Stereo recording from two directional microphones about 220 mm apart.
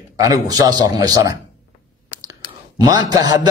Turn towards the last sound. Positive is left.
turn(degrees=-20)  # may be behind; listen again after turning